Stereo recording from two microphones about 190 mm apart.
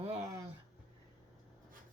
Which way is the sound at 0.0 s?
35° right (ahead or behind).